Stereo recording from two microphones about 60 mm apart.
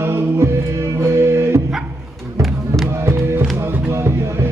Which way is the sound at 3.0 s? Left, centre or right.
Right.